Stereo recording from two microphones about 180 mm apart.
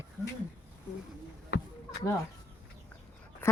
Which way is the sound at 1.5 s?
80° left.